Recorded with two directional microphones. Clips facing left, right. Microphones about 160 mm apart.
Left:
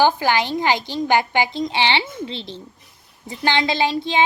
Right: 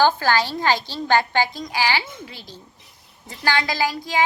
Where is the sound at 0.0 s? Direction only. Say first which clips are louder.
Left 1 dB; 15° left (ahead or behind).